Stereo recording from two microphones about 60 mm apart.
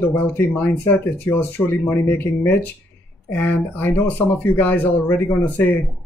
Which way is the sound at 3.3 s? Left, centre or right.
Left.